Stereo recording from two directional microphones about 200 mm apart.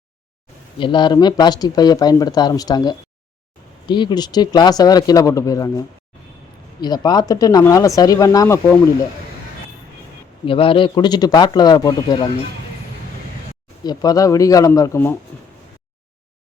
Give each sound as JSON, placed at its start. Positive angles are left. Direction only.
{"t": 0.8, "sound": "speech", "side_deg": 25}
{"t": 6.8, "sound": "speech", "side_deg": 20}
{"t": 10.4, "sound": "speech", "side_deg": 25}
{"t": 13.8, "sound": "speech", "side_deg": 20}